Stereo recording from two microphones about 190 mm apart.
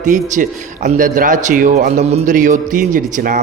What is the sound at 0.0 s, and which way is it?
A man's voice, 40° right (ahead or behind).